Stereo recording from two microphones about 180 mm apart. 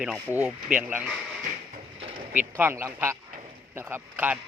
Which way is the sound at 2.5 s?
15° right (ahead or behind).